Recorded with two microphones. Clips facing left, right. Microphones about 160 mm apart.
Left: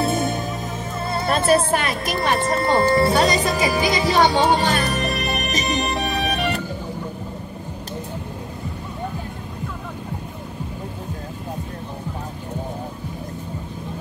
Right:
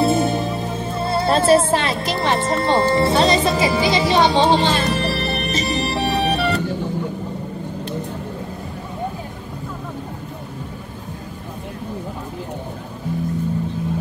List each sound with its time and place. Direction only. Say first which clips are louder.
0.0 s music: right 4 dB; 30° right (ahead or behind)